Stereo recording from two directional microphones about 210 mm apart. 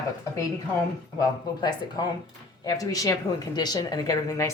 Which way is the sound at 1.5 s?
20° left (ahead or behind).